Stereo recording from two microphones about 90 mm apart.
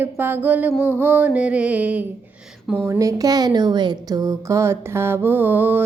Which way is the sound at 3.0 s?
40° right (ahead or behind).